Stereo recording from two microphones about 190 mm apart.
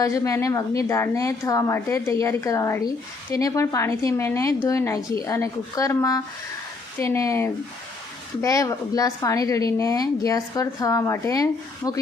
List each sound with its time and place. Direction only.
0.0 s a woman's voice: 15° left (ahead or behind)